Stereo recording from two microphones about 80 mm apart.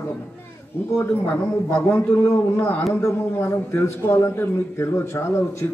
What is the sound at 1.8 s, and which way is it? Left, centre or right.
A man's voice, left.